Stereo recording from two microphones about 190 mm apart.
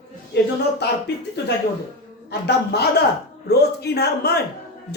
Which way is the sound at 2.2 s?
60° left (ahead or behind).